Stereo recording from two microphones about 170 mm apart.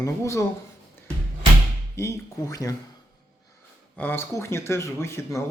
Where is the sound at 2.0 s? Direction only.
20° left (ahead or behind).